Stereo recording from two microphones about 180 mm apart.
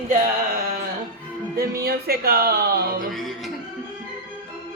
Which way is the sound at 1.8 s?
60° right (ahead or behind).